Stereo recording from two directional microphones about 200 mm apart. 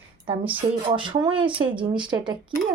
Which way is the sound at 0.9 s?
20° right (ahead or behind).